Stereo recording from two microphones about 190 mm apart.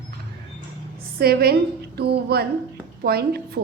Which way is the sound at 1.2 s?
55° right (ahead or behind).